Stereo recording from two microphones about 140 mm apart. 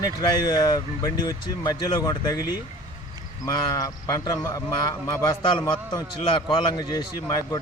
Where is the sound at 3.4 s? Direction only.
25° left (ahead or behind).